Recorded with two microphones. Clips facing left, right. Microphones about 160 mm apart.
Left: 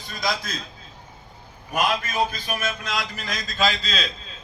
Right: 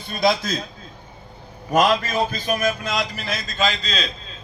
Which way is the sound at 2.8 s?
25° right (ahead or behind).